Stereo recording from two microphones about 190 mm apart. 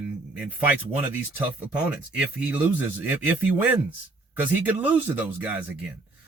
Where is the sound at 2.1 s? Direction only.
5° right (ahead or behind).